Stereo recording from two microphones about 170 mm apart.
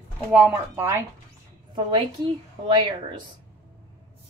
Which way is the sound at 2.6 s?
30° right (ahead or behind).